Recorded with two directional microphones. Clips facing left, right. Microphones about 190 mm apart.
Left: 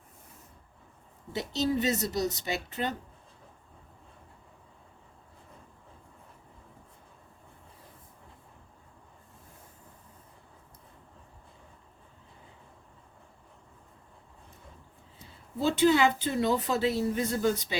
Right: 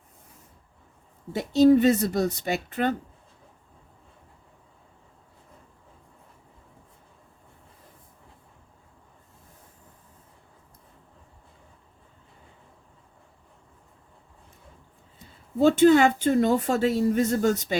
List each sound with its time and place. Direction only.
1.3 s a woman's voice: 55° right (ahead or behind)
15.6 s a woman's voice: 50° right (ahead or behind)